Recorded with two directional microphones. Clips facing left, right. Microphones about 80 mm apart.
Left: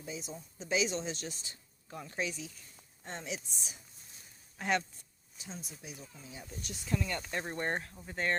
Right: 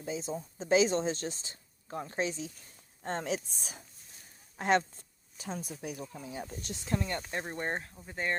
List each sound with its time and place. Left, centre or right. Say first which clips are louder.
0.0 s speech: right 7 dB; right
2.6 s speech: right 3 dB; right
4.5 s speech: right 5 dB; right
5.4 s speech: right 8 dB; right
5.7 s speech: right 9 dB; right
7.0 s speech: right 1 dB; right; by 8.4 s centre